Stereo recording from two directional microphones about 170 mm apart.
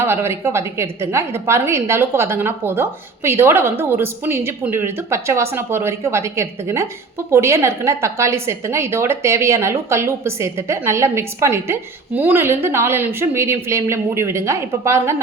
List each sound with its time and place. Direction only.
0.0 s a woman's voice: 15° right (ahead or behind)